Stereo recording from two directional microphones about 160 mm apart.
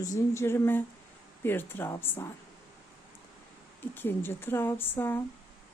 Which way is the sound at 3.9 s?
15° left (ahead or behind).